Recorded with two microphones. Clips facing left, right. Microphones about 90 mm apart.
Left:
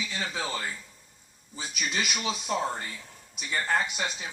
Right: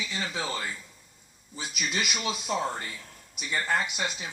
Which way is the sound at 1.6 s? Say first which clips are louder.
Even; 5° right (ahead or behind).